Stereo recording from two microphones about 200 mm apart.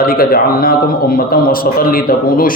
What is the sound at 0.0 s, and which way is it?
A man's voice, 50° left (ahead or behind).